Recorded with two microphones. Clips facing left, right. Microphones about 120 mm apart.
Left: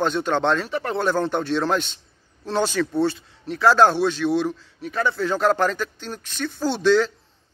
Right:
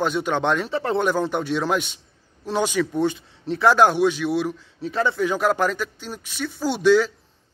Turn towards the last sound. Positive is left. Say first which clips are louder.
# right 1 dB
turn(degrees=-10)  # may be behind; listen again after turning